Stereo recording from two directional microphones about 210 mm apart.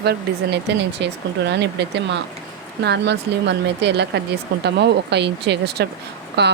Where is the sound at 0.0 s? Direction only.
50° right (ahead or behind).